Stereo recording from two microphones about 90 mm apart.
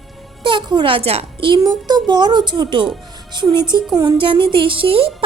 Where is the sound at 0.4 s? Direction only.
65° right (ahead or behind).